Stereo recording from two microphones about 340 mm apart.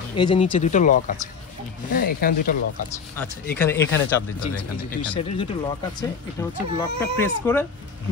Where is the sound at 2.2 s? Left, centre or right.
Left.